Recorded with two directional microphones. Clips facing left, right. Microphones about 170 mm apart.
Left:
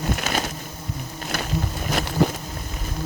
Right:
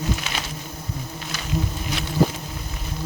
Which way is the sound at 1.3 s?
60° left (ahead or behind).